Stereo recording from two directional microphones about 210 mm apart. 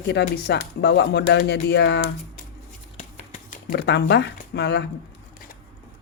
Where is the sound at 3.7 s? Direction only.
55° left (ahead or behind).